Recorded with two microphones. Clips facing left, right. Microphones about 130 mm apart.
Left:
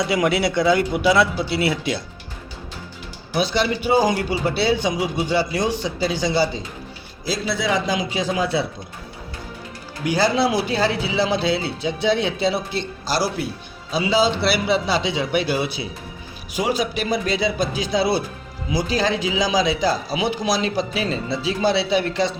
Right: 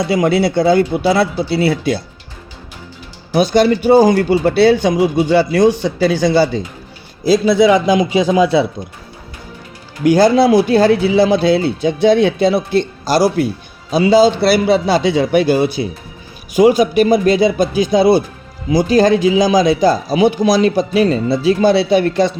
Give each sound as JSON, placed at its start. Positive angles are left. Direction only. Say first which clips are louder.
{"t": 0.1, "sound": "speech", "louder": "right 6 dB", "side_deg": -30}
{"t": 3.3, "sound": "speech", "louder": "right 9 dB", "side_deg": -45}
{"t": 4.4, "sound": "speech", "louder": "right 8 dB", "side_deg": -85}
{"t": 6.1, "sound": "a man's voice", "louder": "right 8 dB", "side_deg": -50}
{"t": 10.1, "sound": "speech", "louder": "right 9 dB", "side_deg": -50}